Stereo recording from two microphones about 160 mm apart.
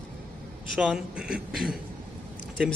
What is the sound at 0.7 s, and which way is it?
Speech, 5° right (ahead or behind).